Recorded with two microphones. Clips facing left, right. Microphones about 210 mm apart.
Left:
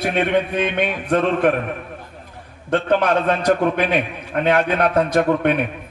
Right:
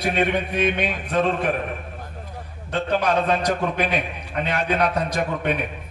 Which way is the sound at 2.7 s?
55° left (ahead or behind).